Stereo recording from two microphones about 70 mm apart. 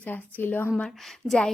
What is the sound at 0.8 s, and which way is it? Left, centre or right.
Speech, centre.